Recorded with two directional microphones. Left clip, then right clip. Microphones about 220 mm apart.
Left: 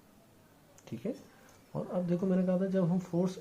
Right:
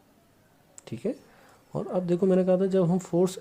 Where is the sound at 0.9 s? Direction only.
50° right (ahead or behind).